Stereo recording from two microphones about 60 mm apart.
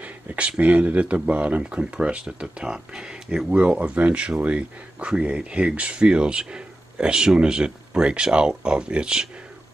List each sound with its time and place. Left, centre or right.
0.0 s speech: right